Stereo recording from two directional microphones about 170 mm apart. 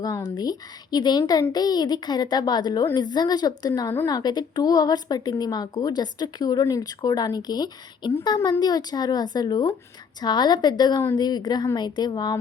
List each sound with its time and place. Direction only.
0.0 s a woman's voice: 20° left (ahead or behind)